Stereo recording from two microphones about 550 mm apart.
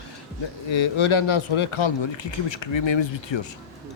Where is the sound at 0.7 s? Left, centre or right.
Left.